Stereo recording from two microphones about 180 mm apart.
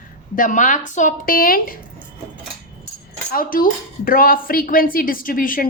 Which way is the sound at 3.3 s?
50° left (ahead or behind).